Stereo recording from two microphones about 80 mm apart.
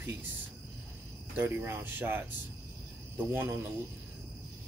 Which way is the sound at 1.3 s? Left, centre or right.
Right.